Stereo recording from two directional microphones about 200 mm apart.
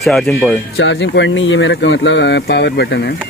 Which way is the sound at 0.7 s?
70° left (ahead or behind).